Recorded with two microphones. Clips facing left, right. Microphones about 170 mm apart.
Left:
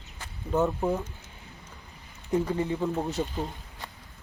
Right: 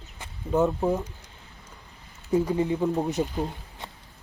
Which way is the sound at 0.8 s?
15° right (ahead or behind).